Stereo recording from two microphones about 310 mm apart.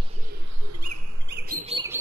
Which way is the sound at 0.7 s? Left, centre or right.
Right.